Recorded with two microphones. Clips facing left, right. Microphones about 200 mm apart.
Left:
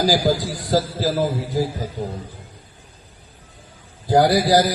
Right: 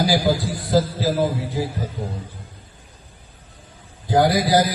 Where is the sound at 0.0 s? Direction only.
45° left (ahead or behind).